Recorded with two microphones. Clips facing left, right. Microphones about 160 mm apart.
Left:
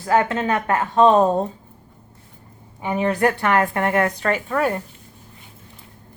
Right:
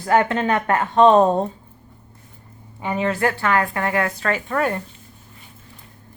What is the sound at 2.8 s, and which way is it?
Speech, 15° left (ahead or behind).